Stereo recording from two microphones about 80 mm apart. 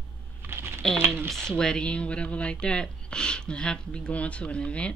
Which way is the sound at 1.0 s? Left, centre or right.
Right.